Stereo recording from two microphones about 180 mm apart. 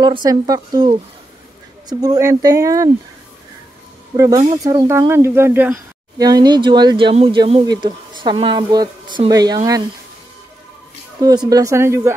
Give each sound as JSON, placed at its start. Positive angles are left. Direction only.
{"t": 0.0, "sound": "speech", "side_deg": -25}
{"t": 4.1, "sound": "speech", "side_deg": -15}
{"t": 6.1, "sound": "speech", "side_deg": -20}
{"t": 11.1, "sound": "speech", "side_deg": -20}